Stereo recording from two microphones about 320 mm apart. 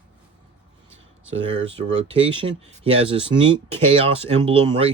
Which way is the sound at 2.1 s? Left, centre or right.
Centre.